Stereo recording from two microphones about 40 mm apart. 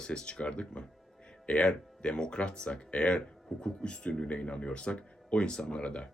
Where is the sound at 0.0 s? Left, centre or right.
Left.